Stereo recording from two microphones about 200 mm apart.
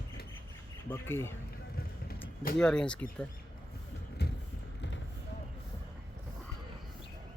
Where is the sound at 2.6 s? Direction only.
5° left (ahead or behind).